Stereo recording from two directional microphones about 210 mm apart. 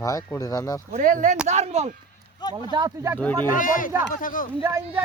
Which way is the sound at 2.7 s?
15° right (ahead or behind).